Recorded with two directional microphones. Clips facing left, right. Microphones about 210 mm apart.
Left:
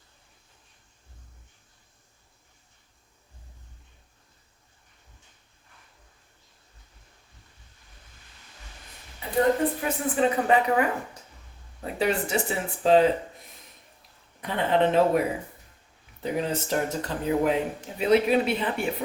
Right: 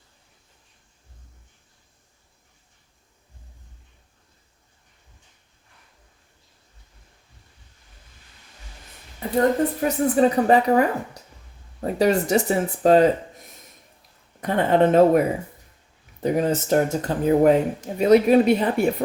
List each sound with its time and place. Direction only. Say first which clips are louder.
9.2 s a sound: right 9 dB; 45° right (ahead or behind)
9.8 s a woman's voice: right 10 dB; 40° right (ahead or behind)
14.4 s speech: right 5 dB; 45° right (ahead or behind)
16.2 s speech: right 7 dB; 45° right (ahead or behind)